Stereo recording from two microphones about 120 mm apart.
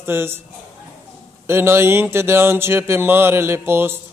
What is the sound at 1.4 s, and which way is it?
A man's voice, 20° right (ahead or behind).